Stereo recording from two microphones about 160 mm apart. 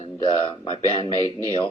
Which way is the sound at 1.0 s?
25° right (ahead or behind).